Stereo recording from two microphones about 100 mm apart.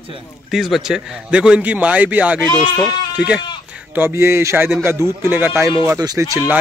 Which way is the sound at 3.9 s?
25° right (ahead or behind).